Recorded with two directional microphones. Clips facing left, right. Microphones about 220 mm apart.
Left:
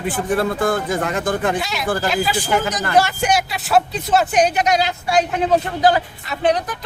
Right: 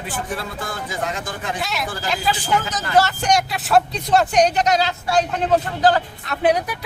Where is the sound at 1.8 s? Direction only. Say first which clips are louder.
Left 7 dB; 55° left (ahead or behind).